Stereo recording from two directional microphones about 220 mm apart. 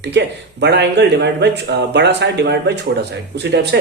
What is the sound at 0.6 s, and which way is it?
Speech, 50° right (ahead or behind).